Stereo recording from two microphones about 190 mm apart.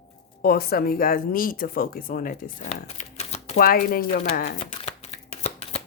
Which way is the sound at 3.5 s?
50° left (ahead or behind).